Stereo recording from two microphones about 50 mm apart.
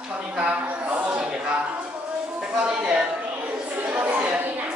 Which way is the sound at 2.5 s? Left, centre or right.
Right.